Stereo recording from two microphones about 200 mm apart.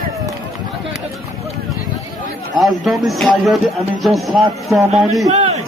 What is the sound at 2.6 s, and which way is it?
Speech, centre (ahead or behind).